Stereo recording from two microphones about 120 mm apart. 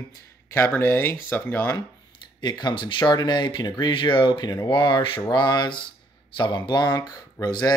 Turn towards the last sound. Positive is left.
turn(degrees=35)  # may be behind; listen again after turning